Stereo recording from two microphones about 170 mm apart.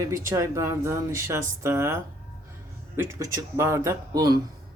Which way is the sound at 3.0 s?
15° right (ahead or behind).